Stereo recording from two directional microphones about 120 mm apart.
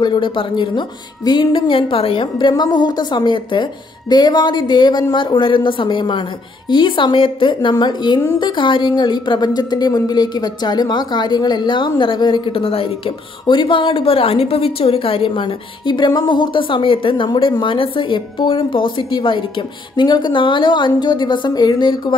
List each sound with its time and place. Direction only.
0.0 s speech: 45° left (ahead or behind)